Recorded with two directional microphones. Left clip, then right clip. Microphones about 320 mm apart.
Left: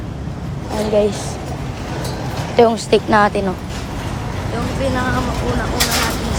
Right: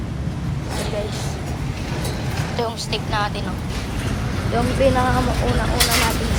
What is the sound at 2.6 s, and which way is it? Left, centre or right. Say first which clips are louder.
Speech: left 14 dB; left.